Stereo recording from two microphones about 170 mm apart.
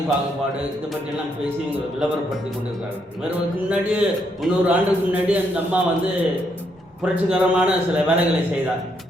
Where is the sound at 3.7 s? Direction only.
5° right (ahead or behind).